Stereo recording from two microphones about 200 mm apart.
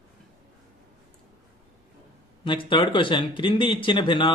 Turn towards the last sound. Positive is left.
turn(degrees=25)  # may be behind; listen again after turning